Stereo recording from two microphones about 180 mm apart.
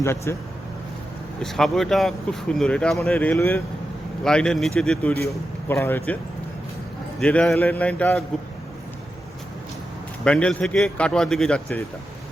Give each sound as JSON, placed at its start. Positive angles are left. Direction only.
{"t": 0.0, "sound": "a man's voice", "side_deg": 15}
{"t": 1.4, "sound": "a man's voice", "side_deg": 0}
{"t": 5.1, "sound": "a man's voice", "side_deg": 15}
{"t": 7.2, "sound": "a man's voice", "side_deg": 5}
{"t": 10.2, "sound": "speech", "side_deg": 5}